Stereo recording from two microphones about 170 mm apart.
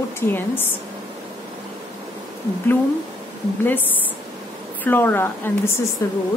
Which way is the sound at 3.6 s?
10° left (ahead or behind).